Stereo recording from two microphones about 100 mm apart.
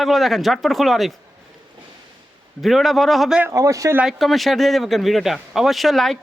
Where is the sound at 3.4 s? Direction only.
30° right (ahead or behind).